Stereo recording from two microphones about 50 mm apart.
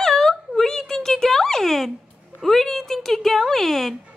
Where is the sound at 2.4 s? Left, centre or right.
Centre.